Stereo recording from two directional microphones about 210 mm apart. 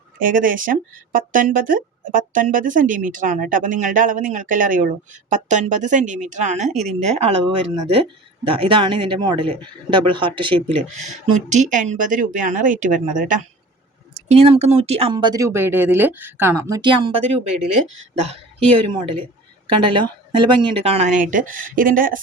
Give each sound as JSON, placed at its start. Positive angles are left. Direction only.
{"t": 0.2, "sound": "speech", "side_deg": -40}